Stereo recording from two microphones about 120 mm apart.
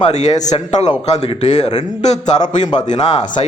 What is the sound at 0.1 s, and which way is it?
A man's voice, 75° left (ahead or behind).